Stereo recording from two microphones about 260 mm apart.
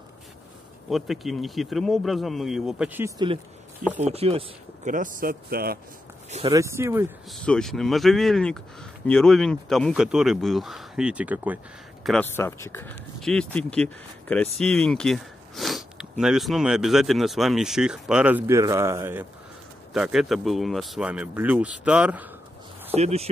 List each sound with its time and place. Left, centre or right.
0.8 s speech: centre
4.0 s speech: right
6.3 s speech: centre
7.4 s speech: centre
22.9 s speech: right